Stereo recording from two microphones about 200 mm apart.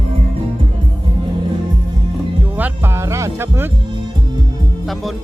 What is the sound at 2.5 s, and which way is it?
Music, 10° right (ahead or behind).